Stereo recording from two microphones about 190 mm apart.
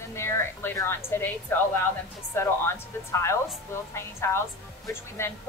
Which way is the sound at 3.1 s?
15° left (ahead or behind).